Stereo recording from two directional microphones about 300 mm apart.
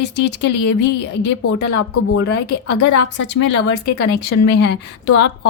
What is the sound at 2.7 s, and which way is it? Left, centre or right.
A woman's voice, left.